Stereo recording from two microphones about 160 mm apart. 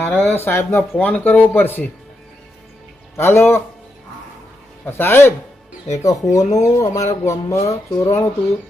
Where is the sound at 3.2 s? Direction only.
15° left (ahead or behind).